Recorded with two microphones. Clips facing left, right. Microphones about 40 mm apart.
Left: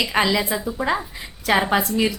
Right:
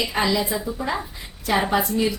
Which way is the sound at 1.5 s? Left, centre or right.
Left.